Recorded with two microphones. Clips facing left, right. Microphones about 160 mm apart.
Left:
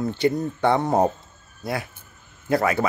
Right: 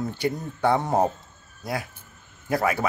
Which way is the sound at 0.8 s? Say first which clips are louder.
Left 3 dB; 10° left (ahead or behind).